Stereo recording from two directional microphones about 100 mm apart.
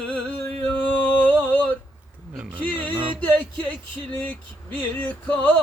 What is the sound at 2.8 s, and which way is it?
Music, 55° right (ahead or behind).